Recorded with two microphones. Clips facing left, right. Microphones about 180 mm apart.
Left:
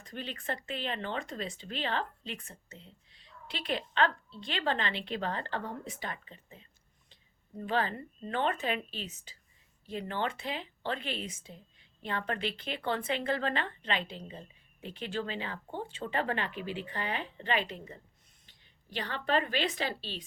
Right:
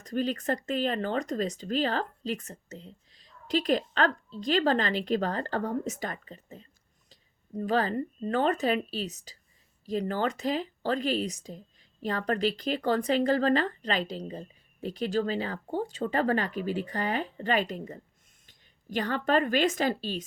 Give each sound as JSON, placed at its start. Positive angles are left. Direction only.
{"t": 0.0, "sound": "a woman's voice", "side_deg": -40}